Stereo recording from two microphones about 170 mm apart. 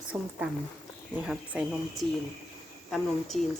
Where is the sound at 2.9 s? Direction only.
Centre (ahead or behind).